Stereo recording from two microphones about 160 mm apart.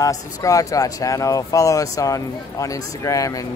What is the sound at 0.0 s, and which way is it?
Speech, 20° left (ahead or behind).